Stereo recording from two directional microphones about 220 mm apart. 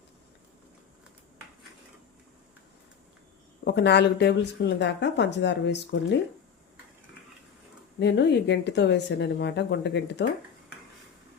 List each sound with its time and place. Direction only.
3.6 s speech: 50° left (ahead or behind)
7.9 s speech: 50° left (ahead or behind)